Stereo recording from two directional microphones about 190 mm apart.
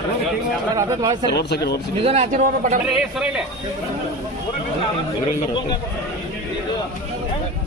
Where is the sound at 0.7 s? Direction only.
20° right (ahead or behind).